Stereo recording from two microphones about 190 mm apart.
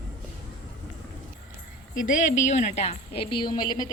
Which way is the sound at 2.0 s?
40° left (ahead or behind).